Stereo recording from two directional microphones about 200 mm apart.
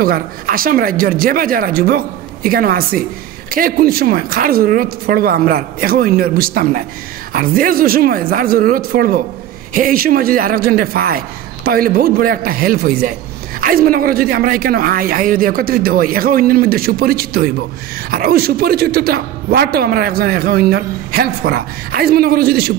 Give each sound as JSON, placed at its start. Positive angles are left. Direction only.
{"t": 0.0, "sound": "speech", "side_deg": -45}